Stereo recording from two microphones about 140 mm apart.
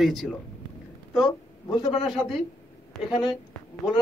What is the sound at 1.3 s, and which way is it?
Speech, 30° left (ahead or behind).